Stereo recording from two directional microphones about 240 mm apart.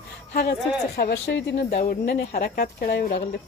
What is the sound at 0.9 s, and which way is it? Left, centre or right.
Speech, left.